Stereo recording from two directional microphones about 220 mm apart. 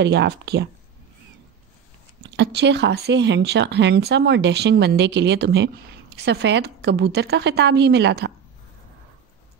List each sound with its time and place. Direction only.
0.0 s speech: 50° right (ahead or behind)
2.3 s speech: 50° right (ahead or behind)